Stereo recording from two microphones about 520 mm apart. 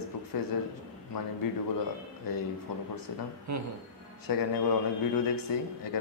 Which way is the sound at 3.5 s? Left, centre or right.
Right.